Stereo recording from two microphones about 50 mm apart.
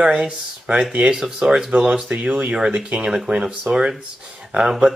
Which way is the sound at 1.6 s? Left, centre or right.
Right.